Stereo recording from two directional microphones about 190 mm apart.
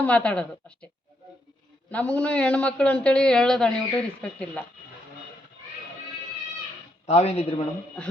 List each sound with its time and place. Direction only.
0.0 s a man's voice: 5° left (ahead or behind)
1.9 s a man's voice: 5° left (ahead or behind)
7.1 s speech: 35° left (ahead or behind)